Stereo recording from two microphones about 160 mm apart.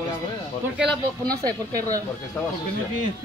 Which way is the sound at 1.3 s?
25° right (ahead or behind).